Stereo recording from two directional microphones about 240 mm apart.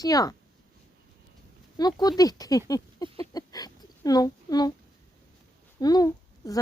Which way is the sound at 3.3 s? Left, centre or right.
Centre.